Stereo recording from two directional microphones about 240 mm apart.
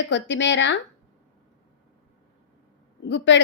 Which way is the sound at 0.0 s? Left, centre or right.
Left.